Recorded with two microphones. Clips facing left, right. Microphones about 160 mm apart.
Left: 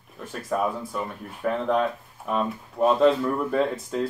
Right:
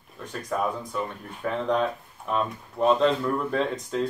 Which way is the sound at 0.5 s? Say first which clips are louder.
Left 2 dB; 5° left (ahead or behind).